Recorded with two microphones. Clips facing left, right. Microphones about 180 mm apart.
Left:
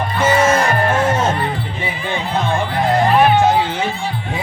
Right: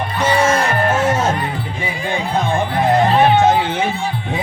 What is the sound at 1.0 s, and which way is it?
Music, 10° right (ahead or behind).